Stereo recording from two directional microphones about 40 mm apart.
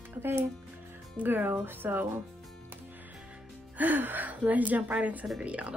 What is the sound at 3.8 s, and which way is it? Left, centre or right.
Speech, right.